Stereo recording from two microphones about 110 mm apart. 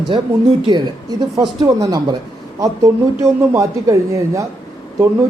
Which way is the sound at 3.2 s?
25° right (ahead or behind).